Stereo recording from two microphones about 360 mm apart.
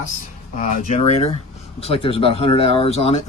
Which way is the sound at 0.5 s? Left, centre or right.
Centre.